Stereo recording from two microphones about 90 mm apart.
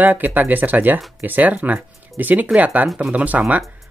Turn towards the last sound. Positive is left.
turn(degrees=-15)  # may be behind; listen again after turning